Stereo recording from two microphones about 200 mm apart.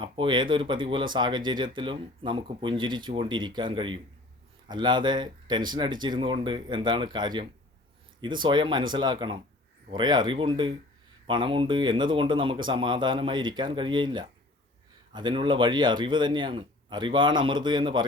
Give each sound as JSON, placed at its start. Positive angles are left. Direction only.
{"t": 0.0, "sound": "speech", "side_deg": -25}